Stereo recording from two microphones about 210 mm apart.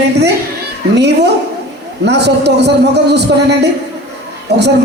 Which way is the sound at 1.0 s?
55° right (ahead or behind).